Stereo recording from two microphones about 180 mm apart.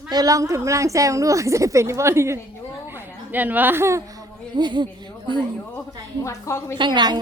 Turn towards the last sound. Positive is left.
turn(degrees=-25)  # may be behind; listen again after turning